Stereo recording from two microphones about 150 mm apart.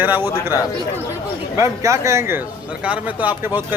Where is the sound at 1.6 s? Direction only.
20° right (ahead or behind).